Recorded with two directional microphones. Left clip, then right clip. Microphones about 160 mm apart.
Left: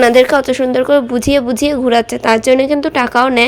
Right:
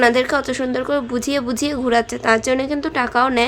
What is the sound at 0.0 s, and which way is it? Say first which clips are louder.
Speech: left 7 dB; 35° left (ahead or behind).